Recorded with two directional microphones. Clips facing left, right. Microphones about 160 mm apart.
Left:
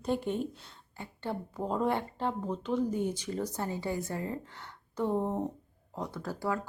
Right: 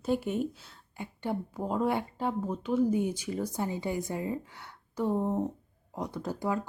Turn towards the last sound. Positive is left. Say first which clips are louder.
# right 2 dB
turn(degrees=-20)  # may be behind; listen again after turning